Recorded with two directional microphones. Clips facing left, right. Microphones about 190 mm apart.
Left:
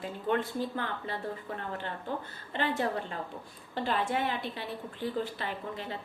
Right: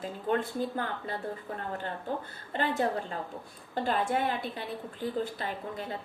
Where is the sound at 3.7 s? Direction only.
45° right (ahead or behind).